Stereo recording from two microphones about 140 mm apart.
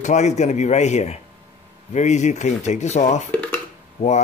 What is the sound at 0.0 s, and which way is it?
Speech, 55° left (ahead or behind).